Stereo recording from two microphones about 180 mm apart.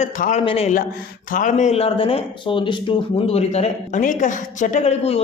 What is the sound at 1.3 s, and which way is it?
Speech, 45° left (ahead or behind).